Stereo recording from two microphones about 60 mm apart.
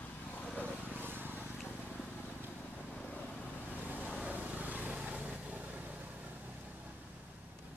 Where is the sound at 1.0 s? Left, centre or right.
Right.